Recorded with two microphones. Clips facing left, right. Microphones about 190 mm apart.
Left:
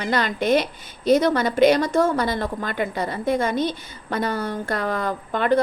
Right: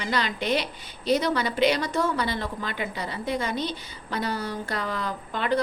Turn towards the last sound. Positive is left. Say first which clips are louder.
# left 6 dB
turn(degrees=50)  # may be behind; listen again after turning